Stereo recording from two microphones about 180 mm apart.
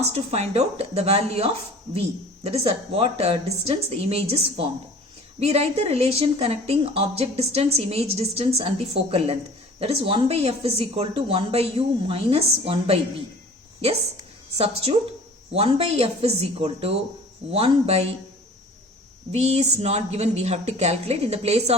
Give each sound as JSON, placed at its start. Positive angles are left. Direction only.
{"t": 0.0, "sound": "a woman's voice", "side_deg": -35}
{"t": 14.6, "sound": "a woman's voice", "side_deg": -35}
{"t": 19.3, "sound": "a woman's voice", "side_deg": -35}